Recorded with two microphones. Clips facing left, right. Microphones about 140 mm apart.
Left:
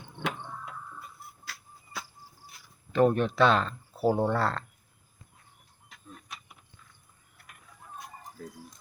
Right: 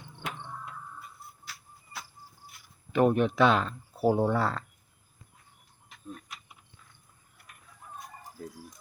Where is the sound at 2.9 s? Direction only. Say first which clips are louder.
Even; 15° right (ahead or behind).